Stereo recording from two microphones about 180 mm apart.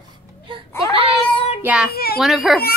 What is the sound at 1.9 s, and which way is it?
Speech, 60° left (ahead or behind).